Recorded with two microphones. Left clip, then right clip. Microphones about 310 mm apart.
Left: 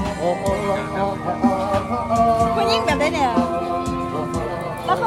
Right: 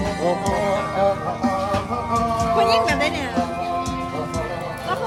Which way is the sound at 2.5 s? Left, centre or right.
Centre.